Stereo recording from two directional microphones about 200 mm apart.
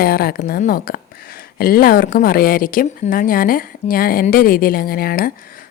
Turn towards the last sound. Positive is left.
turn(degrees=45)  # may be behind; listen again after turning